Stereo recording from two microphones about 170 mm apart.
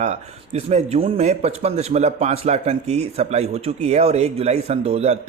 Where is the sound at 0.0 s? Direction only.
40° right (ahead or behind).